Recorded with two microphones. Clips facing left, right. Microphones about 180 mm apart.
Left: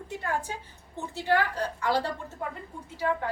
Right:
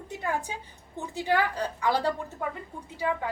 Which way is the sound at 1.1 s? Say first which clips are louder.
Even; 15° right (ahead or behind).